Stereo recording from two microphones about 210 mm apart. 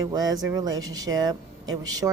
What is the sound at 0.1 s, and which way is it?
Speech, 20° right (ahead or behind).